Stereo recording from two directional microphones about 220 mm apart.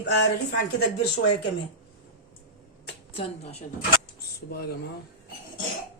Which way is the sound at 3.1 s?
25° left (ahead or behind).